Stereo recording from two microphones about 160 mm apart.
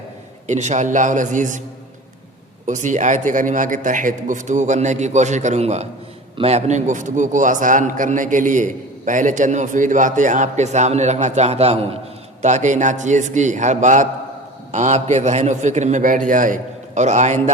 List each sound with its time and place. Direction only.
0.4 s a man's voice: 45° right (ahead or behind)
2.6 s a man's voice: 50° right (ahead or behind)